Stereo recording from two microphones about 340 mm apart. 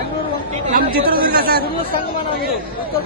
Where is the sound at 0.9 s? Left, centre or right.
Right.